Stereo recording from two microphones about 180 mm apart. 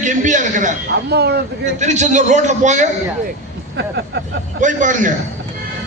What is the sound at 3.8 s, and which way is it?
Speech, 65° right (ahead or behind).